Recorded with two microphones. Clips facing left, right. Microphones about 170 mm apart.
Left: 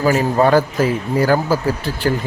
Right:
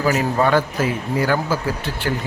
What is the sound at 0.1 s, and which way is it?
Speech, 35° left (ahead or behind).